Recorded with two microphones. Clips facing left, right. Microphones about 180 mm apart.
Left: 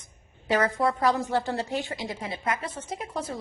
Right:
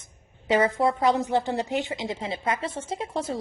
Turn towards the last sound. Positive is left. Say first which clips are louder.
# right 4 dB
turn(degrees=-25)  # may be behind; listen again after turning